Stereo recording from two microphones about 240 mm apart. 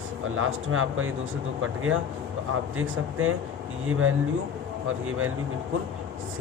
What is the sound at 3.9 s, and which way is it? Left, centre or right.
Speech, right.